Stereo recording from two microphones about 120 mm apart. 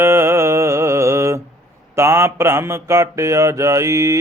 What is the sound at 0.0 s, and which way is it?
Mantra, 20° right (ahead or behind).